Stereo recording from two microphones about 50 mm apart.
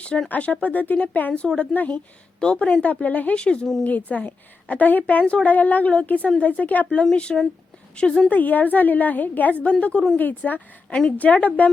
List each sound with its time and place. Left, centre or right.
0.3 s speech: left
2.4 s speech: centre
3.3 s speech: centre
3.8 s a woman's voice: left
5.2 s a woman's voice: left
7.0 s speech: centre
8.3 s a woman's voice: left
10.8 s speech: centre
11.2 s speech: left